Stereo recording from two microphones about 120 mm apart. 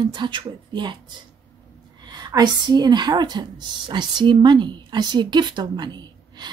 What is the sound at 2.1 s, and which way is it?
Speech, 35° right (ahead or behind).